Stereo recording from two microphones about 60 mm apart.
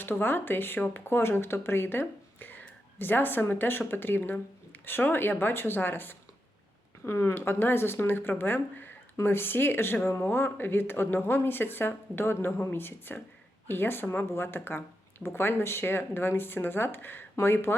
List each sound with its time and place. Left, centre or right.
0.0 s speech: left
7.0 s speech: left